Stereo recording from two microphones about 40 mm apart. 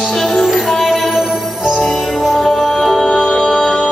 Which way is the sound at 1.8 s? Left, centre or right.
Centre.